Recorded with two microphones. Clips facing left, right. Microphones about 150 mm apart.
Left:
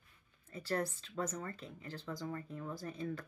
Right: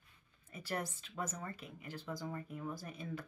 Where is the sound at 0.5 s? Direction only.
15° right (ahead or behind).